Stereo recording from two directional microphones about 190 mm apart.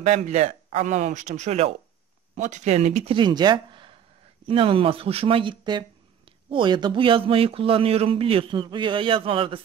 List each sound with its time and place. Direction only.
0.0 s speech: 35° right (ahead or behind)
3.2 s speech: 25° right (ahead or behind)